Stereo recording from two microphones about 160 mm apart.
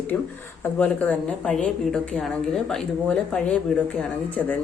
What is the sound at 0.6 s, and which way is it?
A woman's voice, 10° left (ahead or behind).